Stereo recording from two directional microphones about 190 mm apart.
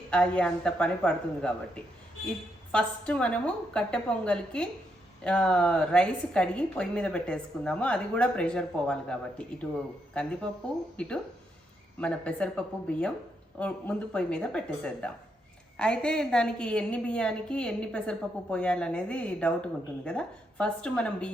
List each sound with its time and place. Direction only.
0.1 s a woman's voice: 5° left (ahead or behind)